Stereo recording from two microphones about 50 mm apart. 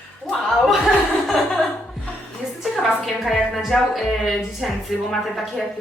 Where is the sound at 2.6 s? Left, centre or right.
Centre.